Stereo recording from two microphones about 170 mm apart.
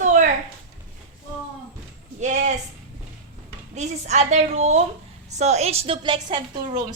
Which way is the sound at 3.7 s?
40° right (ahead or behind).